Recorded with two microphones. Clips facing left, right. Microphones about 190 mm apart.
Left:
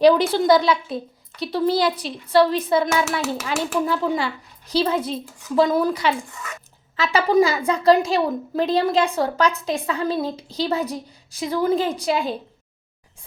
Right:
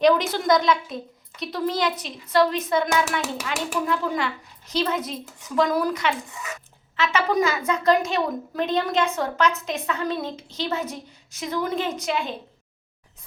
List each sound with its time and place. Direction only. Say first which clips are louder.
0.0 s a woman's voice: left 4 dB; 30° left (ahead or behind)
3.2 s a child's voice: left 4 dB; 15° right (ahead or behind)
3.8 s a woman's voice: left 3 dB; 35° left (ahead or behind)